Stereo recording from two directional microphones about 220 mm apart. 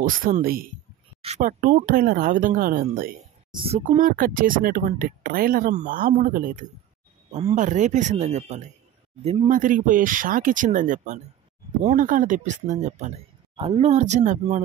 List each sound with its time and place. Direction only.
0.0 s speech: 40° right (ahead or behind)
3.5 s speech: 30° right (ahead or behind)